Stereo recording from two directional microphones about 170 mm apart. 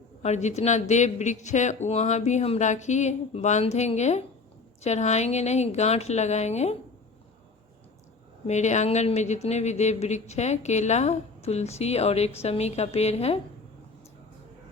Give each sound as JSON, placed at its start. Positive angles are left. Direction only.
{"t": 0.2, "sound": "speech", "side_deg": 40}
{"t": 8.4, "sound": "speech", "side_deg": 45}